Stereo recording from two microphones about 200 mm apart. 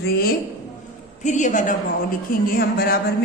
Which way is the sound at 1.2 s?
40° left (ahead or behind).